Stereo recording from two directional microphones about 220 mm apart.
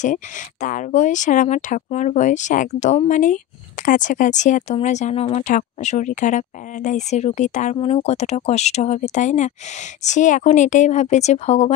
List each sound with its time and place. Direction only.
0.0 s speech: 35° left (ahead or behind)